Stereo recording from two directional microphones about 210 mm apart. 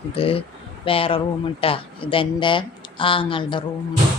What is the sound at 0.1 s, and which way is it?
Speech, 25° left (ahead or behind).